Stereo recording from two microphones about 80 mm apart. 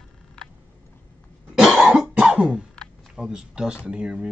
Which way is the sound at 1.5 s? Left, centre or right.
Centre.